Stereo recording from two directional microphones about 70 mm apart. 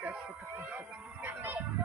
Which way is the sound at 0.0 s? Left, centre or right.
Centre.